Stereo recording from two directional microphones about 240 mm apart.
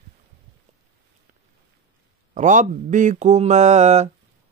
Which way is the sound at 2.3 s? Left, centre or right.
Right.